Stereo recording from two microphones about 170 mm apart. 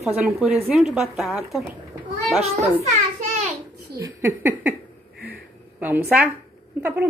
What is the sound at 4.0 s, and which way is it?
Speech, 15° right (ahead or behind).